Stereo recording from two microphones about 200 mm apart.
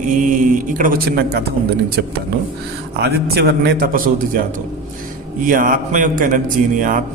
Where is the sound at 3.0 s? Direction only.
55° right (ahead or behind).